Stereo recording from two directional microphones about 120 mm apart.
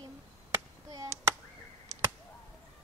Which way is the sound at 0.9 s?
25° right (ahead or behind).